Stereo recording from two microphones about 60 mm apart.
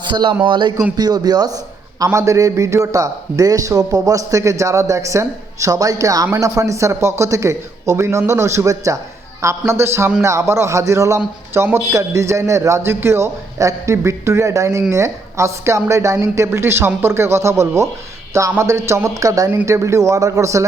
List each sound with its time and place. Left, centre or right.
0.9 s a man's voice: right
2.1 s a man's voice: right
6.4 s a man's voice: right
9.4 s a man's voice: right
19.1 s speech: right
19.6 s a man's voice: right